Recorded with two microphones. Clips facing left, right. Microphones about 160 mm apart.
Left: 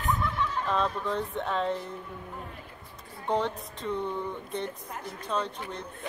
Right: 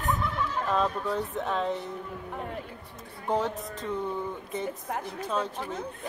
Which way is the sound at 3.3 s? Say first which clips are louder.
Right 1 dB; centre (ahead or behind).